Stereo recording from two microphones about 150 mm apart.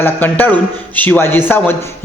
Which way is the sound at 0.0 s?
10° left (ahead or behind).